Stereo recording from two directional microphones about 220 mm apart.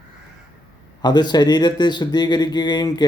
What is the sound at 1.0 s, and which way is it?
Speech, 20° left (ahead or behind).